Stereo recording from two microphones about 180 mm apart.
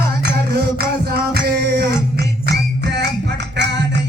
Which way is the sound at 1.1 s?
60° right (ahead or behind).